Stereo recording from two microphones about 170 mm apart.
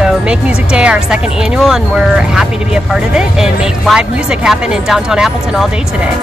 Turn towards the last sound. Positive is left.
turn(degrees=-5)  # may be behind; listen again after turning